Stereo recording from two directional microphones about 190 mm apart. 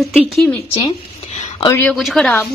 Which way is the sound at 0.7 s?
35° left (ahead or behind).